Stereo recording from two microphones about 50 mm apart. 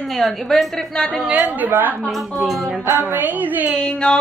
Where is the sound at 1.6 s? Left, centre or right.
Right.